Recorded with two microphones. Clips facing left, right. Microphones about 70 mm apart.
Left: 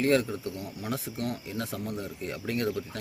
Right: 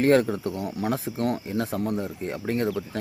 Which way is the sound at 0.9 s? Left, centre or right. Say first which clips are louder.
Right 7 dB; right.